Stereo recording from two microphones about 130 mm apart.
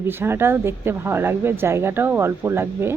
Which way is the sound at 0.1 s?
15° right (ahead or behind).